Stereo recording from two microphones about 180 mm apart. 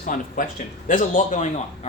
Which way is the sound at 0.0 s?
50° left (ahead or behind).